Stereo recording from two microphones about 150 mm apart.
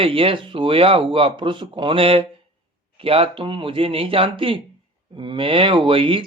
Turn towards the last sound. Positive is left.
turn(degrees=-35)  # may be behind; listen again after turning